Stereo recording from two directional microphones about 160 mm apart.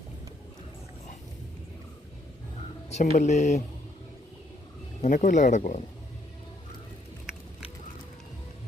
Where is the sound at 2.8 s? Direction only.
45° left (ahead or behind).